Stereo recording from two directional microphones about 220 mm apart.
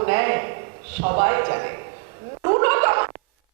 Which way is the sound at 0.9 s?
15° right (ahead or behind).